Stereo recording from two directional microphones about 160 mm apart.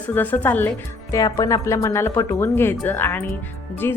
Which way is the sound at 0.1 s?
10° left (ahead or behind).